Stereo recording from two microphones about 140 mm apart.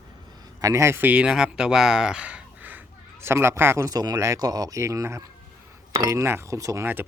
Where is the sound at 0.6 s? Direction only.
25° right (ahead or behind).